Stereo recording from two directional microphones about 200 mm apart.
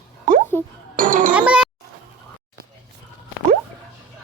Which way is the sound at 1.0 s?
40° right (ahead or behind).